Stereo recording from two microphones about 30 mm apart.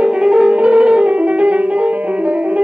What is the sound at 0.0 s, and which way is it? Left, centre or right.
Music, right.